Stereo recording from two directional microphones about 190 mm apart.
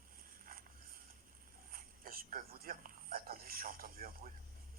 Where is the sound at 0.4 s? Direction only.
50° right (ahead or behind).